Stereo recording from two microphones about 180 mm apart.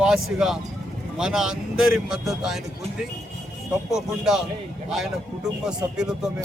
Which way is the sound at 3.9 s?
5° right (ahead or behind).